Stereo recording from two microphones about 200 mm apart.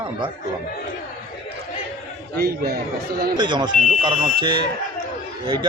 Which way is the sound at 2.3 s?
50° right (ahead or behind).